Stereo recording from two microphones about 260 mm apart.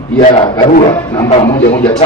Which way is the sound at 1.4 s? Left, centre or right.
Centre.